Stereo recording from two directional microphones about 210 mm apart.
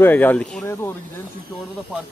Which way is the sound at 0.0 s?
10° left (ahead or behind).